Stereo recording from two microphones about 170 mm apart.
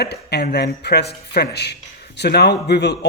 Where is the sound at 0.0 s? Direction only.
75° left (ahead or behind).